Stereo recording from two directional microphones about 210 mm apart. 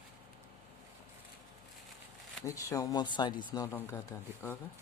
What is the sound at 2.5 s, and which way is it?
Speech, 15° left (ahead or behind).